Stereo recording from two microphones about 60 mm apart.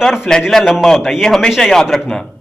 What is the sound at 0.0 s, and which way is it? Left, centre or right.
Speech, centre.